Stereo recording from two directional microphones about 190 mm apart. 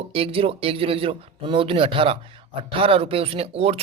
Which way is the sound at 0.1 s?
30° right (ahead or behind).